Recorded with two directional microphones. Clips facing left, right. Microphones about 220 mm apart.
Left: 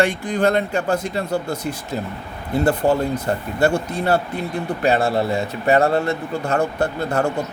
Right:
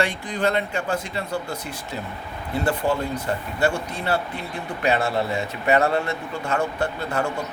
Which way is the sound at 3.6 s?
40° left (ahead or behind).